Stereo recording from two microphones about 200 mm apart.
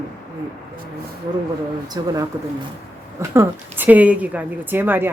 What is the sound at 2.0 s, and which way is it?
Speech, 20° right (ahead or behind).